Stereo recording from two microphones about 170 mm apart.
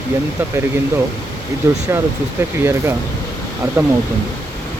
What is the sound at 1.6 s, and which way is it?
Speech, 15° right (ahead or behind).